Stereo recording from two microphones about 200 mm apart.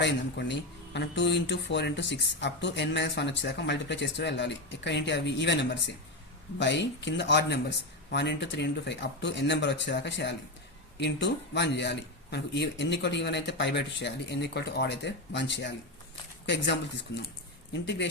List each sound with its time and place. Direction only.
0.0 s speech: 60° left (ahead or behind)